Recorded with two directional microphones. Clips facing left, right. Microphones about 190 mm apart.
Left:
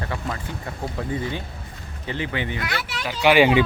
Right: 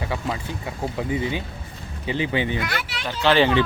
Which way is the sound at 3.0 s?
10° left (ahead or behind).